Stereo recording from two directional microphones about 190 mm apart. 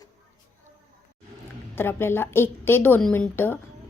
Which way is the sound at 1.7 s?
10° left (ahead or behind).